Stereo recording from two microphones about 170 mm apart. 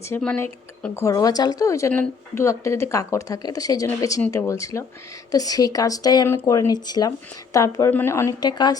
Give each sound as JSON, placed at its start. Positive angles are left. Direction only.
{"t": 0.2, "sound": "speech", "side_deg": 10}